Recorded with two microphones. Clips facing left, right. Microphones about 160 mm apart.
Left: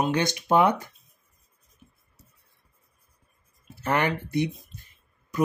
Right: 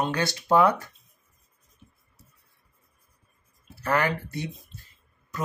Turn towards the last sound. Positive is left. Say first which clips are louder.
# even
turn(degrees=15)  # may be behind; listen again after turning